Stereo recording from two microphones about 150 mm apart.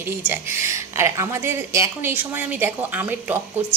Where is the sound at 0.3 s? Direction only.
15° right (ahead or behind).